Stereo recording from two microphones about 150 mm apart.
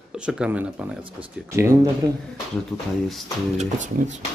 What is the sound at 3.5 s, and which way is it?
Speech, 50° right (ahead or behind).